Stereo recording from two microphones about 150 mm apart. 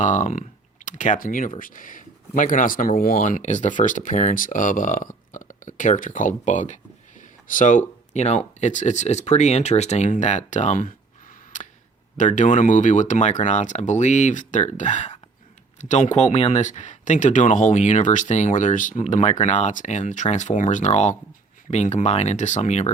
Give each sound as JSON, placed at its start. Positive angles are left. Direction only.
{"t": 0.0, "sound": "speech", "side_deg": 55}